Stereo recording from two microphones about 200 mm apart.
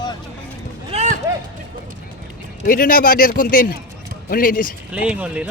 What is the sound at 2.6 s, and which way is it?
A man's voice, 45° left (ahead or behind).